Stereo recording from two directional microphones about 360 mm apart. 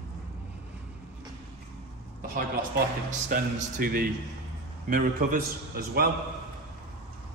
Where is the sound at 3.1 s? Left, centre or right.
Right.